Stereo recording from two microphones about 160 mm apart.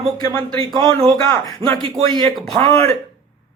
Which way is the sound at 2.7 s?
20° left (ahead or behind).